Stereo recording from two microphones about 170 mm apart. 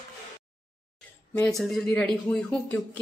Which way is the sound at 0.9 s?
5° left (ahead or behind).